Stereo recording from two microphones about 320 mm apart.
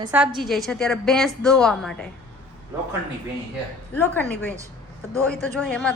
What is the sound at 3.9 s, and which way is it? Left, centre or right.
Speech, centre.